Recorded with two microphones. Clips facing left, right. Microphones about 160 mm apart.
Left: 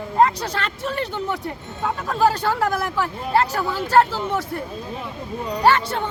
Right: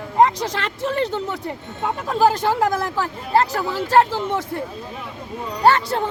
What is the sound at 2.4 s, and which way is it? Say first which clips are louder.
Speech: right 2 dB; 20° right (ahead or behind).